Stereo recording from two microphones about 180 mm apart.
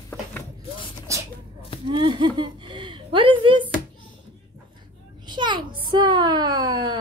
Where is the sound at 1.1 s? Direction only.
15° right (ahead or behind).